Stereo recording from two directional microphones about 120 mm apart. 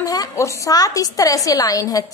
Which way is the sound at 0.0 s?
30° left (ahead or behind).